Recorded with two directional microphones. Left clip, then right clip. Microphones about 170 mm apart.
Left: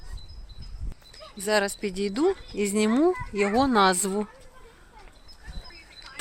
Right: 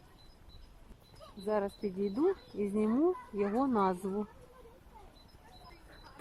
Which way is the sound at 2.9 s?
40° left (ahead or behind).